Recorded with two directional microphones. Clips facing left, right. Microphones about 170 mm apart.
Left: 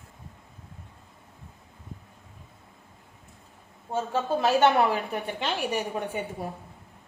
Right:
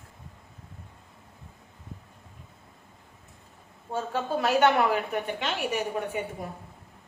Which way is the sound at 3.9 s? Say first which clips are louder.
Left 2 dB; 25° left (ahead or behind).